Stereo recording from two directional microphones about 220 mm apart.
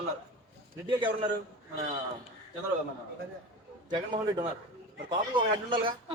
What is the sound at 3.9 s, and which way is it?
A man's voice, 20° right (ahead or behind).